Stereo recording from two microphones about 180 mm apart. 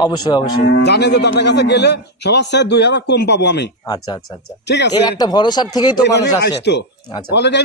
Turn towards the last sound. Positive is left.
turn(degrees=70)  # may be behind; listen again after turning